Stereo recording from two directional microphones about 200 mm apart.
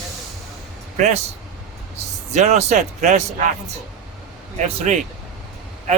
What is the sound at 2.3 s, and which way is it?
Speech, 35° right (ahead or behind).